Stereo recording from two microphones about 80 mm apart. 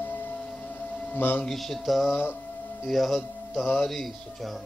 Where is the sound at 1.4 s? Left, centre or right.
Centre.